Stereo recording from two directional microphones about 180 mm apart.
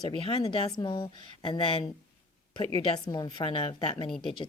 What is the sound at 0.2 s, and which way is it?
A woman's voice, 30° left (ahead or behind).